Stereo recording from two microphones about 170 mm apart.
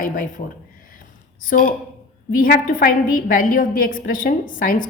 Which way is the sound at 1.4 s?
55° left (ahead or behind).